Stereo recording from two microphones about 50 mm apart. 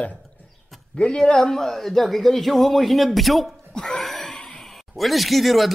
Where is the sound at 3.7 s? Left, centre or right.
Centre.